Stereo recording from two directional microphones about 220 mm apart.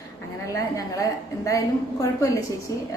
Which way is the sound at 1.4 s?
15° left (ahead or behind).